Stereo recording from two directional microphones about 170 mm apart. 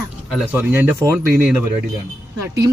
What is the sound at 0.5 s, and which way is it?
A woman's voice, 10° right (ahead or behind).